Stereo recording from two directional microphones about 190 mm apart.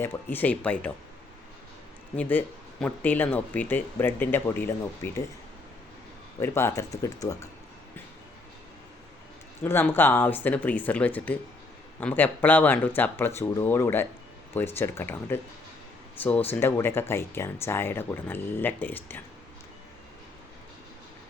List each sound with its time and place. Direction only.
0.0 s speech: 10° left (ahead or behind)
2.8 s speech: 10° left (ahead or behind)
6.4 s speech: 15° left (ahead or behind)
9.6 s speech: 10° left (ahead or behind)
16.5 s speech: 10° left (ahead or behind)